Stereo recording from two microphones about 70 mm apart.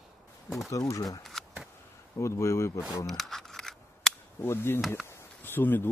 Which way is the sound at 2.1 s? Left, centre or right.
Left.